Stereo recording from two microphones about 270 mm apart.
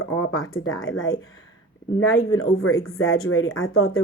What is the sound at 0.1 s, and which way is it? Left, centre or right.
Speech, left.